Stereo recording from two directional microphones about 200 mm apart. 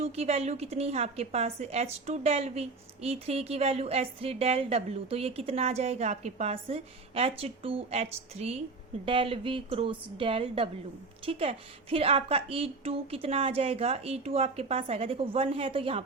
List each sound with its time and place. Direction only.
0.0 s a woman's voice: 30° right (ahead or behind)